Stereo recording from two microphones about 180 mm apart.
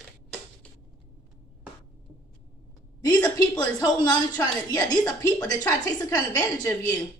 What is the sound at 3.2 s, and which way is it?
Speech, 20° left (ahead or behind).